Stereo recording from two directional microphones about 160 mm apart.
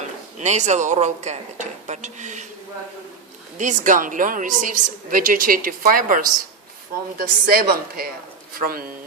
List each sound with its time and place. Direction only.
0.0 s speech: 45° right (ahead or behind)
3.6 s a woman's voice: 50° right (ahead or behind)